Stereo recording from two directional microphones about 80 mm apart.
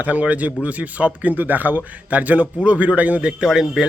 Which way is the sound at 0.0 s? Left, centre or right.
Centre.